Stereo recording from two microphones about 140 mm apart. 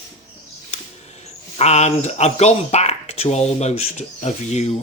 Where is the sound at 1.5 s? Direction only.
50° left (ahead or behind).